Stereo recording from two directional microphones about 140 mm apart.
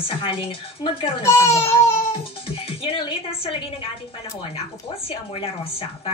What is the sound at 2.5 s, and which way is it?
Speech, 40° left (ahead or behind).